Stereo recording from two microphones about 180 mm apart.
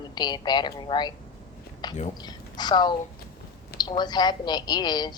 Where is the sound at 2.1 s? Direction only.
25° left (ahead or behind).